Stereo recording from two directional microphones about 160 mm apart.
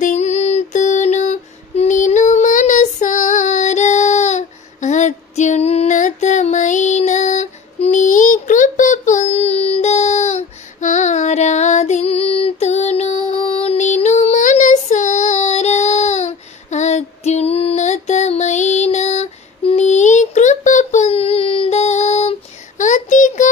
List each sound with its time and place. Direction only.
0.0 s female singing: 45° left (ahead or behind)
22.8 s child singing: 50° left (ahead or behind)